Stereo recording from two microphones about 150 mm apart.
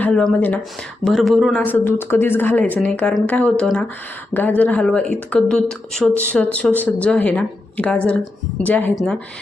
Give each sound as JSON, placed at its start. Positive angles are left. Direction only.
{"t": 0.0, "sound": "speech", "side_deg": 5}
{"t": 1.6, "sound": "speech", "side_deg": 15}